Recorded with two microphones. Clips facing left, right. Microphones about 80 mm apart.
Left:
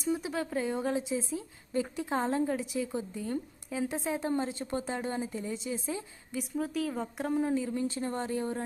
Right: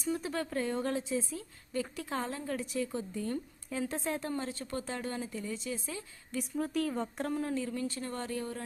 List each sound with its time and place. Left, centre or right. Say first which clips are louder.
0.0 s a woman's voice: left 2 dB; centre
2.6 s a woman's voice: left 2 dB; centre
6.3 s speech: even; centre
7.3 s speech: left 6 dB; centre